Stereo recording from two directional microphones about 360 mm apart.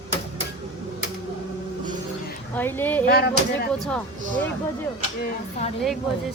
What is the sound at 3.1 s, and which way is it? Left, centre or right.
Speech, left.